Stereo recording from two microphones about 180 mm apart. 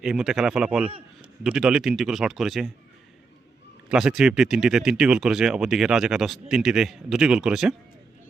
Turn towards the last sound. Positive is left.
turn(degrees=-5)  # may be behind; listen again after turning